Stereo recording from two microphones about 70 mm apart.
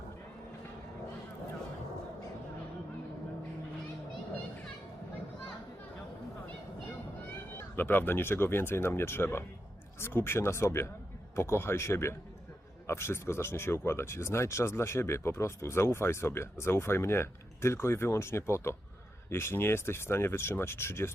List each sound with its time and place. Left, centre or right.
7.5 s speech: left